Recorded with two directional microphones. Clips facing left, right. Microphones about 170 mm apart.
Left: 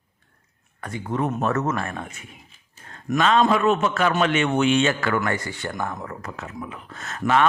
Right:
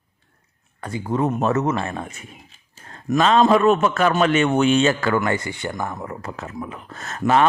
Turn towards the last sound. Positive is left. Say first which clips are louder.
# right 3 dB
turn(degrees=-35)  # may be behind; listen again after turning